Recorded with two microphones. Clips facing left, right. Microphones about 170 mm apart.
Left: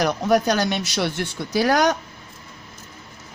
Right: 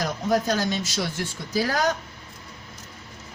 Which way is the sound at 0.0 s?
70° left (ahead or behind).